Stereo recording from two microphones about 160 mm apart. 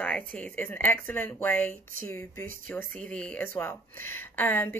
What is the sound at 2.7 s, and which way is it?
Speech, 5° left (ahead or behind).